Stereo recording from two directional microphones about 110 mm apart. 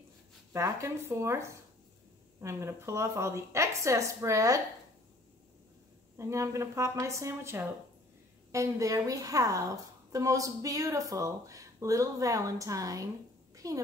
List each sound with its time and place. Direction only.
0.5 s a woman's voice: 25° right (ahead or behind)
6.1 s a woman's voice: 30° right (ahead or behind)